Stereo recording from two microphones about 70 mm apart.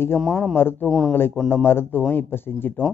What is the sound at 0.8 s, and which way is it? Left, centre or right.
Speech, centre.